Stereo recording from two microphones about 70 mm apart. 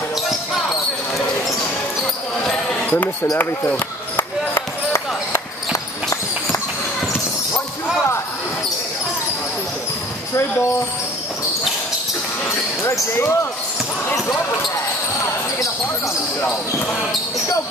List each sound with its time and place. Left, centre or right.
2.5 s basketball bounce: centre
4.2 s basketball bounce: left
13.2 s speech: left